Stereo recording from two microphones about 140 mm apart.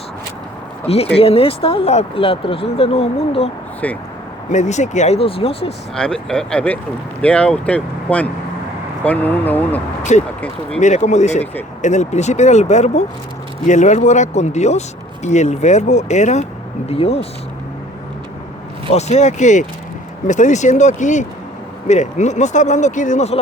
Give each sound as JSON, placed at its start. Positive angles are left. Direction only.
{"t": 0.9, "sound": "speech", "side_deg": 45}
{"t": 3.8, "sound": "speech", "side_deg": 10}
{"t": 4.5, "sound": "speech", "side_deg": 55}
{"t": 5.9, "sound": "speech", "side_deg": 5}
{"t": 10.0, "sound": "speech", "side_deg": 60}
{"t": 16.9, "sound": "speech", "side_deg": 45}
{"t": 18.9, "sound": "speech", "side_deg": 55}